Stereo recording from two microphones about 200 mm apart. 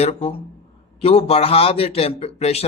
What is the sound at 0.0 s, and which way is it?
A man's voice, 30° left (ahead or behind).